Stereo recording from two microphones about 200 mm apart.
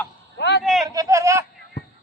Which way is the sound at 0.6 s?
Centre (ahead or behind).